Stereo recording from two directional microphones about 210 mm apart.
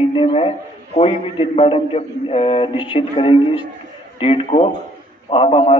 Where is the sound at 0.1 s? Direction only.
25° left (ahead or behind).